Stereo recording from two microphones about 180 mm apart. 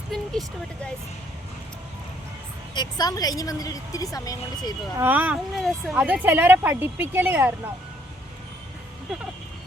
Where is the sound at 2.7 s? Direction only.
25° left (ahead or behind).